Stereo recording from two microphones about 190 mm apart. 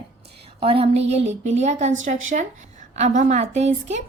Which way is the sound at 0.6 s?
30° right (ahead or behind).